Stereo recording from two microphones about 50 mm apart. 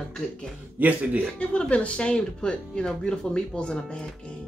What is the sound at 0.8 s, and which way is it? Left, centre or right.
Speech, right.